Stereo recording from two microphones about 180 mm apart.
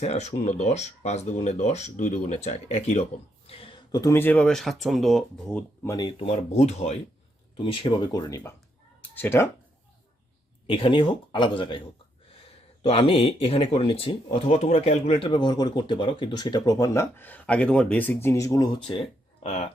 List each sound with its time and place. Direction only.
0.0 s speech: 40° left (ahead or behind); by 6.1 s 15° left (ahead or behind)
6.1 s speech: 35° left (ahead or behind)
9.0 s cat: 10° left (ahead or behind)
10.7 s speech: 25° left (ahead or behind)
12.9 s speech: 35° left (ahead or behind); by 18.7 s 15° left (ahead or behind)
18.9 s a sound: 30° left (ahead or behind)